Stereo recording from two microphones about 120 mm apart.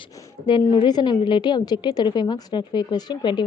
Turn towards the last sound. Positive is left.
turn(degrees=35)  # may be behind; listen again after turning